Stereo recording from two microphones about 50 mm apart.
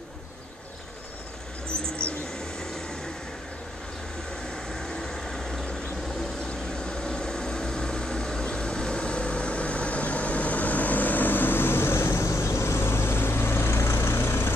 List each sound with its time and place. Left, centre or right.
4.7 s vehicle: centre
6.9 s vehicle: centre; by 14.5 s left